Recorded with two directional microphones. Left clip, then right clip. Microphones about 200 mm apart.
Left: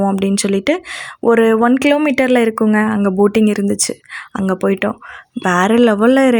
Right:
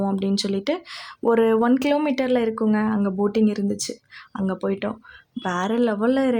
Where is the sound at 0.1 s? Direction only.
20° left (ahead or behind).